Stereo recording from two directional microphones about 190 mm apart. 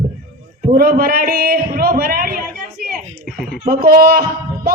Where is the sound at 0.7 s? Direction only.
50° right (ahead or behind).